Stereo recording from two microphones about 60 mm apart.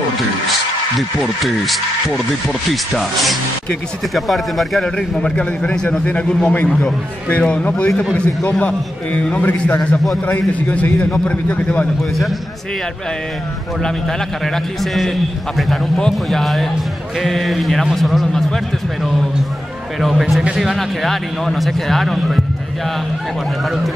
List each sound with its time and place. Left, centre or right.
0.9 s speech: centre
4.9 s a man's voice: centre
7.9 s speech: centre
8.5 s a man's voice: left
15.0 s speech: centre
20.0 s speech: centre